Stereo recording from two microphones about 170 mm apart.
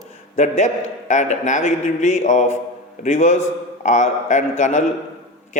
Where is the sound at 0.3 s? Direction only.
45° left (ahead or behind).